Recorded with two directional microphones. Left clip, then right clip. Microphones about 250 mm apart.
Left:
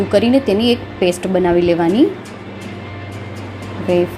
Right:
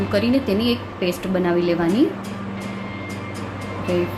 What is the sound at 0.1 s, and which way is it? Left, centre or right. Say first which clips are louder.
A woman's voice: left 7 dB; centre.